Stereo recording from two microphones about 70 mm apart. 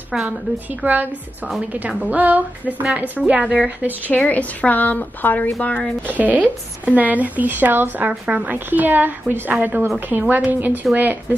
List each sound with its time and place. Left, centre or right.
0.1 s a woman's voice: centre
0.7 s speech: right
4.1 s a woman's voice: left
6.0 s speech: right